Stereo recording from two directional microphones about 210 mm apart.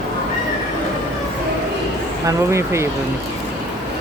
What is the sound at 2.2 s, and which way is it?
Speech, 15° right (ahead or behind).